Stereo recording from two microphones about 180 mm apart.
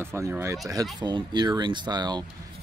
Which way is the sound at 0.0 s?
15° right (ahead or behind).